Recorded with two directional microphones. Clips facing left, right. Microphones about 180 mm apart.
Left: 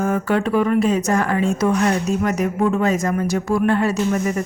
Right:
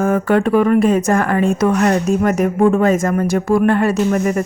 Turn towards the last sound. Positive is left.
turn(degrees=-55)  # may be behind; listen again after turning